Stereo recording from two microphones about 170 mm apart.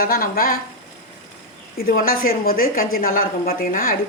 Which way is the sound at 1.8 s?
60° left (ahead or behind).